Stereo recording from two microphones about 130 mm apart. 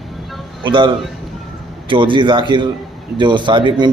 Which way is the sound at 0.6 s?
40° right (ahead or behind).